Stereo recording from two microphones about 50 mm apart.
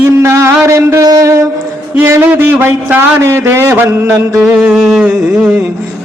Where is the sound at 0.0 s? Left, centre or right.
Right.